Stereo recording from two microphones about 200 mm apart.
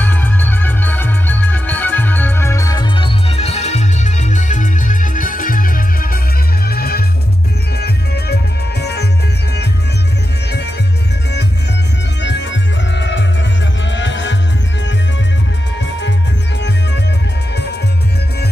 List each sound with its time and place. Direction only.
0.0 s music: 10° left (ahead or behind); by 9.0 s 55° left (ahead or behind)
12.2 s music: 60° left (ahead or behind)